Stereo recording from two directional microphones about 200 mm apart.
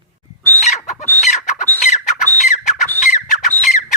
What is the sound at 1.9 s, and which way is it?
Squawk, 40° left (ahead or behind).